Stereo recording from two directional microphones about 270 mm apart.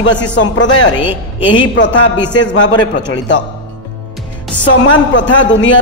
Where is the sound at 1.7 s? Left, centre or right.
Left.